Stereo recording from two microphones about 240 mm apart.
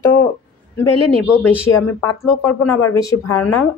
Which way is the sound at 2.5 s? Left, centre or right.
Left.